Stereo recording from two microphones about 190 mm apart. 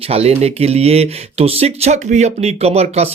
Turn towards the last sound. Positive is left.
turn(degrees=-35)  # may be behind; listen again after turning